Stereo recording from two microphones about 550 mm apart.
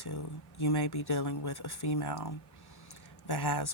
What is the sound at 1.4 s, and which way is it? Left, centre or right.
Speech, left.